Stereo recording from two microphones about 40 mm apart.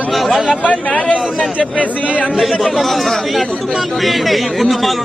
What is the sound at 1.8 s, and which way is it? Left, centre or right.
Speech, left.